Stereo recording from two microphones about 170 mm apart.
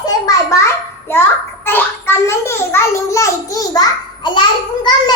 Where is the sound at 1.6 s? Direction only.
15° left (ahead or behind).